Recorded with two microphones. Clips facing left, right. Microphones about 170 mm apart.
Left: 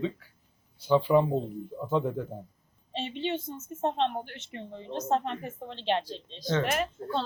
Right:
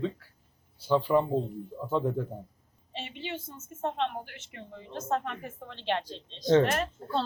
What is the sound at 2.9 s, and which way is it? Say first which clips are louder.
Speech: left 6 dB; 30° left (ahead or behind).